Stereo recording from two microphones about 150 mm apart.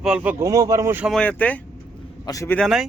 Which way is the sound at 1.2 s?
10° left (ahead or behind).